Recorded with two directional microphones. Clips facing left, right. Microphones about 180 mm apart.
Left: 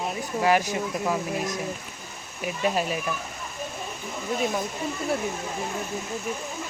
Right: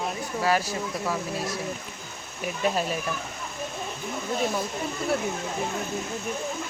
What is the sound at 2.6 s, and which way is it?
Speech, 10° left (ahead or behind).